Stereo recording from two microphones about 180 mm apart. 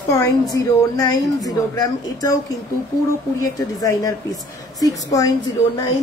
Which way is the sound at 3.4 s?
20° left (ahead or behind).